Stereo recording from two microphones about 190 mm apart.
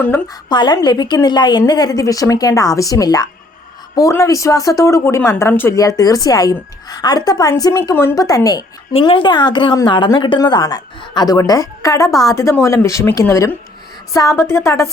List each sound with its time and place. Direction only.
0.4 s a woman's voice: 25° left (ahead or behind)
8.9 s a woman's voice: 30° left (ahead or behind)